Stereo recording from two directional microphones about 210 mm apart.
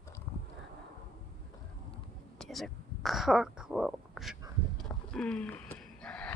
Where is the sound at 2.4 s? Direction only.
Centre (ahead or behind).